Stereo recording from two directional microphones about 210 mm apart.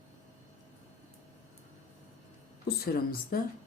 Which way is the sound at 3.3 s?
45° left (ahead or behind).